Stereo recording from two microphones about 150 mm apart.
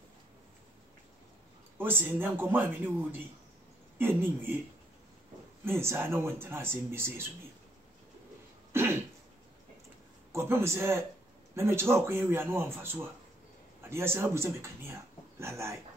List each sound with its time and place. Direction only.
1.8 s speech: 15° right (ahead or behind)
5.7 s speech: 15° right (ahead or behind)
8.7 s throat clearing: 15° right (ahead or behind)
10.3 s speech: 15° right (ahead or behind)